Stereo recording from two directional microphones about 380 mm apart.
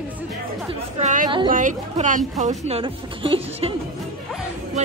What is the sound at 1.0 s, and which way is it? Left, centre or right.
A woman's voice, centre.